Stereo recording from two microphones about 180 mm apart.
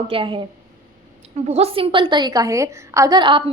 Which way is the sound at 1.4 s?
35° right (ahead or behind).